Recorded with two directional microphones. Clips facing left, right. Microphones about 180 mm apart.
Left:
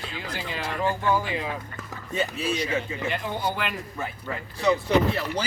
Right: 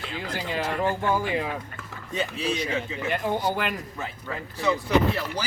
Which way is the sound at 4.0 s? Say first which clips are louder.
Left 1 dB; 15° left (ahead or behind).